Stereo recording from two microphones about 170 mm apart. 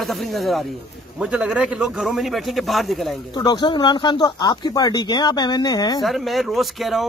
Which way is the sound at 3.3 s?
25° left (ahead or behind).